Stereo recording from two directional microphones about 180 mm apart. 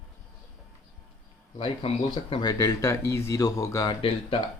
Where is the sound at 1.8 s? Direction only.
30° left (ahead or behind).